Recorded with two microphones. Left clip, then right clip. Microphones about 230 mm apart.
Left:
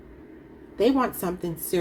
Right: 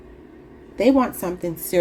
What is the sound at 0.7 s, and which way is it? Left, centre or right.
A woman's voice, right.